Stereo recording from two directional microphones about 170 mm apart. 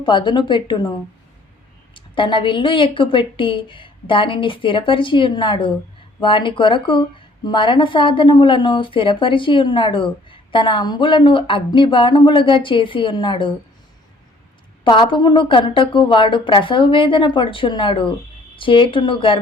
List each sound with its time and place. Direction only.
0.0 s a woman's voice: 30° left (ahead or behind)
1.9 s a woman's voice: 30° left (ahead or behind)
14.8 s a woman's voice: 25° left (ahead or behind)